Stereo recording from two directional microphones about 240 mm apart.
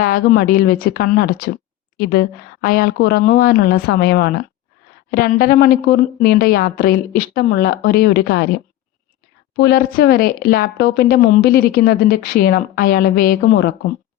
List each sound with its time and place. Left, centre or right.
0.0 s speech: left
9.6 s speech: left